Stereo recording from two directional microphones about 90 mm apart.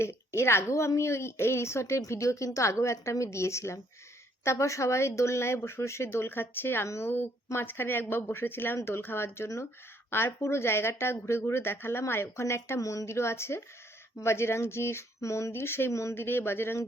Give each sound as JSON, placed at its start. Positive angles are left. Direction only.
{"t": 0.0, "sound": "a woman's voice", "side_deg": 30}